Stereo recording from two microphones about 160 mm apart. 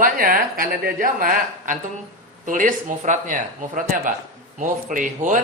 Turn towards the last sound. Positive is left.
turn(degrees=-50)  # may be behind; listen again after turning